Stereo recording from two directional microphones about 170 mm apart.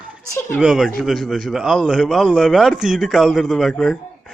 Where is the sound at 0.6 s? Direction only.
Centre (ahead or behind).